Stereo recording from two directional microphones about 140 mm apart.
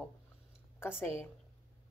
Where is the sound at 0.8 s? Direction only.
15° left (ahead or behind).